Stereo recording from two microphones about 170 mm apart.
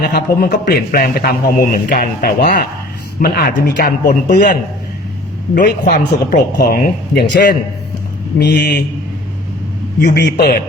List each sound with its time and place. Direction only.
0.0 s a man's voice: 65° left (ahead or behind)
5.9 s a man's voice: 55° left (ahead or behind); by 8.8 s 75° left (ahead or behind)
10.2 s a man's voice: 70° left (ahead or behind)